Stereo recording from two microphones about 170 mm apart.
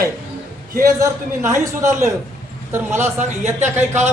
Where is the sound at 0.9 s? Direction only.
20° right (ahead or behind).